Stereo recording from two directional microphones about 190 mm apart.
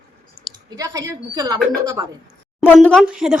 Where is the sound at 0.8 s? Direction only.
20° right (ahead or behind).